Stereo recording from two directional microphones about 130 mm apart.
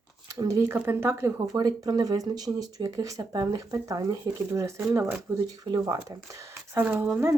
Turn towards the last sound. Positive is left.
turn(degrees=-15)  # may be behind; listen again after turning